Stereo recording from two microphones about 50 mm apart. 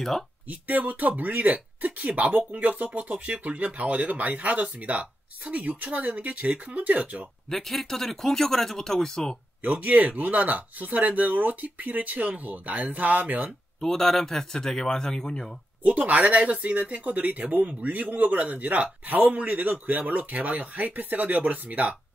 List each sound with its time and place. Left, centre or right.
0.5 s speech: right
7.4 s speech: centre
9.6 s speech: right
13.7 s speech: centre
15.8 s speech: right